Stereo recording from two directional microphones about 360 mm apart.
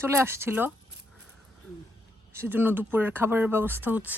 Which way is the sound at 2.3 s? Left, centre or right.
Centre.